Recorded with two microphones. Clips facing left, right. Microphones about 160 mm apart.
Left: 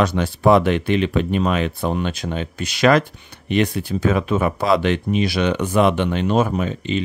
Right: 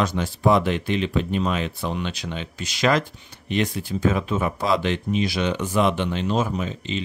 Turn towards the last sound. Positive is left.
turn(degrees=60)  # may be behind; listen again after turning